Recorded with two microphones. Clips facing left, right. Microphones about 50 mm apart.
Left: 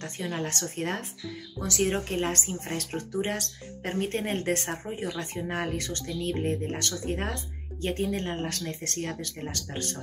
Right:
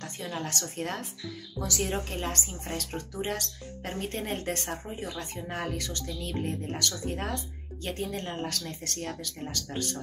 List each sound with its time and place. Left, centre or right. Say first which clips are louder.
0.0 s speech: left 3 dB; left